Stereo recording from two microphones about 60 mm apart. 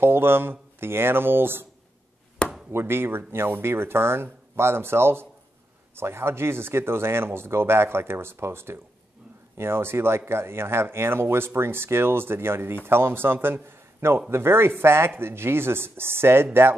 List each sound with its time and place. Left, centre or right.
0.0 s speech: right
2.7 s a man's voice: right